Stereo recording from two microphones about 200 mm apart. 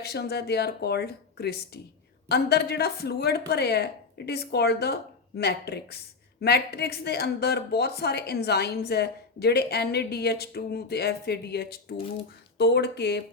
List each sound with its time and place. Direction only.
0.0 s speech: 55° left (ahead or behind)